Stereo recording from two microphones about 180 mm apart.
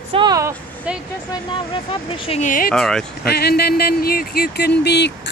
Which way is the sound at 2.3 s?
45° left (ahead or behind).